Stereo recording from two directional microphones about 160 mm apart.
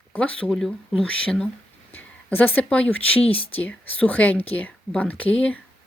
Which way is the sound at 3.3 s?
35° left (ahead or behind).